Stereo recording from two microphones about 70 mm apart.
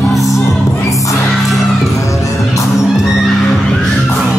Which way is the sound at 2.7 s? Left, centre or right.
Centre.